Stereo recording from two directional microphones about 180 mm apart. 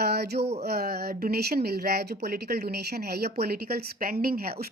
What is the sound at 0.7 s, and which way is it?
A woman's voice, 60° right (ahead or behind).